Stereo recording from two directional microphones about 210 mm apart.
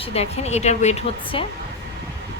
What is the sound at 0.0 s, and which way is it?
Speech, 30° left (ahead or behind).